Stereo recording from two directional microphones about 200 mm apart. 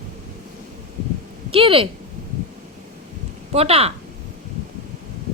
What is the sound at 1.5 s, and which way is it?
Speech, 25° right (ahead or behind).